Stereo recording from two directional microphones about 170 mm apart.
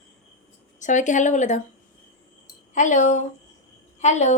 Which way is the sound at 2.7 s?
45° left (ahead or behind).